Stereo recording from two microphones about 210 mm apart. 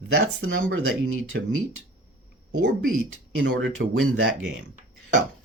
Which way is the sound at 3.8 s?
55° right (ahead or behind).